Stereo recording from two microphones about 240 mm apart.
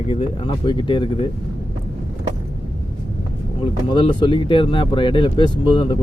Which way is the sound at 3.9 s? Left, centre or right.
Left.